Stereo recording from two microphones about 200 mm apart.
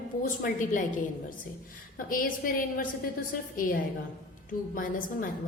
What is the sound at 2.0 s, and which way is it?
A woman's voice, 45° left (ahead or behind).